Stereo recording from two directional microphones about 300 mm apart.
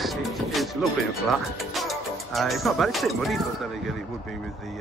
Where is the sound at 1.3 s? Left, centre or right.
Centre.